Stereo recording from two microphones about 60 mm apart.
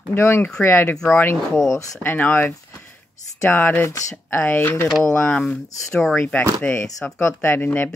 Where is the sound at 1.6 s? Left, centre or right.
Left.